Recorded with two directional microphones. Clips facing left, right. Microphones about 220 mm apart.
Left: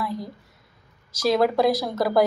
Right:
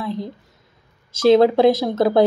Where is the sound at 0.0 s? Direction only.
25° right (ahead or behind).